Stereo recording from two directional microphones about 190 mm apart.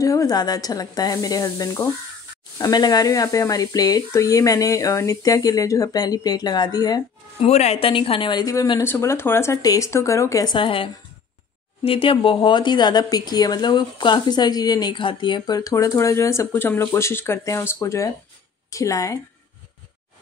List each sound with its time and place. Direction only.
0.0 s speech: 15° left (ahead or behind)
7.4 s speech: 35° left (ahead or behind); by 19.1 s 15° left (ahead or behind)